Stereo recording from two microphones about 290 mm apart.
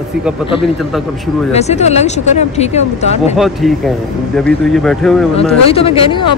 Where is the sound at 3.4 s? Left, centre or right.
Centre.